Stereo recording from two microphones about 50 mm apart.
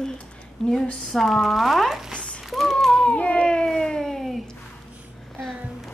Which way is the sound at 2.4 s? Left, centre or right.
Centre.